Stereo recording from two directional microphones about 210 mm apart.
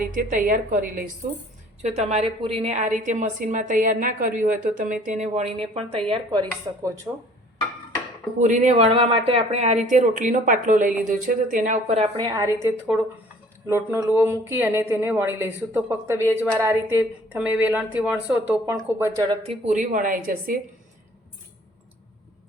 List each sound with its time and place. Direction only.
0.1 s speech: 40° right (ahead or behind); by 7.1 s 20° right (ahead or behind)
8.4 s a woman's voice: 35° right (ahead or behind)